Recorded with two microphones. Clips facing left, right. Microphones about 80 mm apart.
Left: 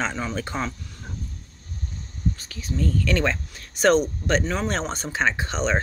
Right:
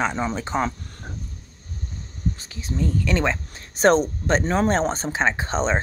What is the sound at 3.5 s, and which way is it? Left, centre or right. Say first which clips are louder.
Speech: right 2 dB; right.